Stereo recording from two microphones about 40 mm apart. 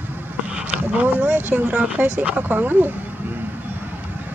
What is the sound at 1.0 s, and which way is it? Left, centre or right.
Speech, right.